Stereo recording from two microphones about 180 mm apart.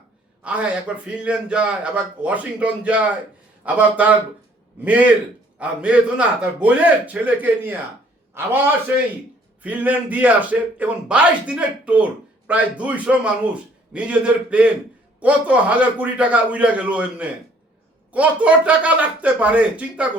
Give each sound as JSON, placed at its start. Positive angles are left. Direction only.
{"t": 0.4, "sound": "a man's voice", "side_deg": -5}
{"t": 9.6, "sound": "a man's voice", "side_deg": -10}